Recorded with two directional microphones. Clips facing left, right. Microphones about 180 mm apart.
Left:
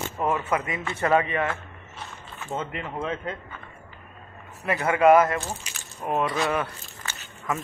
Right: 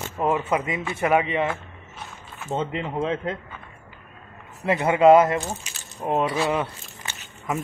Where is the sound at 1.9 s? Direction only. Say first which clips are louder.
Even; centre (ahead or behind).